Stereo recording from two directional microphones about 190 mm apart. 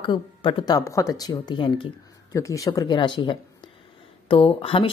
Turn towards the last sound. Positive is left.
turn(degrees=30)  # may be behind; listen again after turning